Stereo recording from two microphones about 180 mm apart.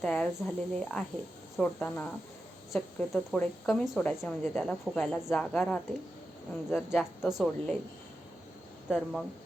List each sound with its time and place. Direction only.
0.0 s a woman's voice: 5° left (ahead or behind)
8.9 s a woman's voice: centre (ahead or behind)